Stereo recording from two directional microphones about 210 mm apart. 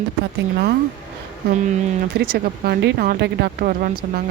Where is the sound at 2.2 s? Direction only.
50° right (ahead or behind).